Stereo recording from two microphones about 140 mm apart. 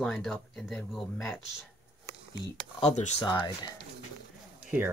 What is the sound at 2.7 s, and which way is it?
Speech, 50° left (ahead or behind).